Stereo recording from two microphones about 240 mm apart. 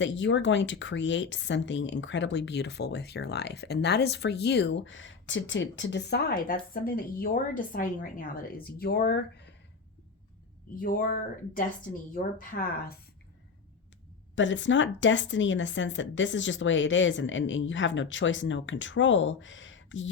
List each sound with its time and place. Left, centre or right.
0.0 s speech: left
10.8 s speech: left
14.3 s speech: left